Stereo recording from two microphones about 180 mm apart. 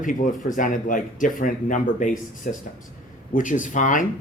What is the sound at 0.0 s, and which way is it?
Speech, 50° left (ahead or behind).